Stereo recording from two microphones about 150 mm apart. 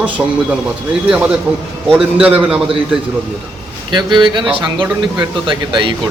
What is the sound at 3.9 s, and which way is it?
A man's voice, 30° right (ahead or behind).